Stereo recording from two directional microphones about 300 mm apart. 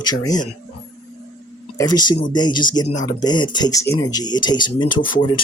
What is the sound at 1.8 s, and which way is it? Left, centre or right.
Speech, centre.